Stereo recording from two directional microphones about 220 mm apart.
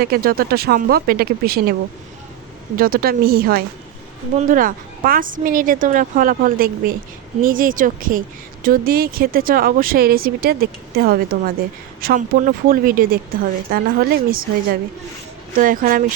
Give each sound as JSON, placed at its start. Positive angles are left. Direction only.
{"t": 0.0, "sound": "speech", "side_deg": -40}
{"t": 2.7, "sound": "speech", "side_deg": -40}